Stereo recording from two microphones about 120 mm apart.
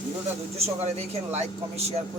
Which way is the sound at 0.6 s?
65° right (ahead or behind).